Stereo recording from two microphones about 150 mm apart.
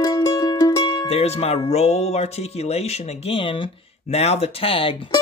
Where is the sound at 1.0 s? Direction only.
45° left (ahead or behind).